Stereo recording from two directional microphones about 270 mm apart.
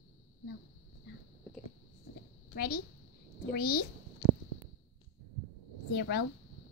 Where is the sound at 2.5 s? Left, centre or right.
Left.